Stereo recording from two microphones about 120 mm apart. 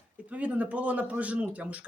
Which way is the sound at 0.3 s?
10° right (ahead or behind).